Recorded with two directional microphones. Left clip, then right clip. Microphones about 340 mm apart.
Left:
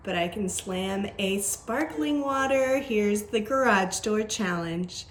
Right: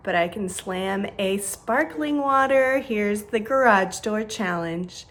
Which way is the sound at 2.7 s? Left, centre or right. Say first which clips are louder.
Right 2 dB; centre.